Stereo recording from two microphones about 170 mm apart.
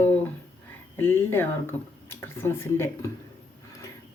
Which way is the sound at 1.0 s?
10° left (ahead or behind).